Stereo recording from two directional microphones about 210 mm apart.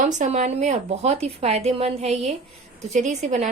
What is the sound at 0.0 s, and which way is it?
Speech, 35° right (ahead or behind).